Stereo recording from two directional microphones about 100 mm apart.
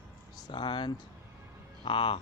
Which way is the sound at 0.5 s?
55° left (ahead or behind).